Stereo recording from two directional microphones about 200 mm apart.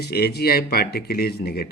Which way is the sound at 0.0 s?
55° left (ahead or behind).